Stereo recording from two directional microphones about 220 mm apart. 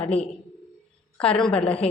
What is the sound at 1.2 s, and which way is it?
Speech, 5° left (ahead or behind).